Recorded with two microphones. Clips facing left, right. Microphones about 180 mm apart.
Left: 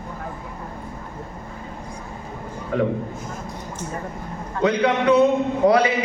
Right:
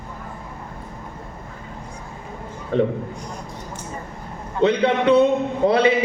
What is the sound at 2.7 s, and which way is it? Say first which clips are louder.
Speech: right 2 dB; 30° right (ahead or behind).